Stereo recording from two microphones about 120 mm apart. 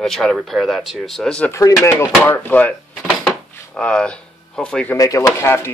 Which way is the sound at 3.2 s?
10° left (ahead or behind).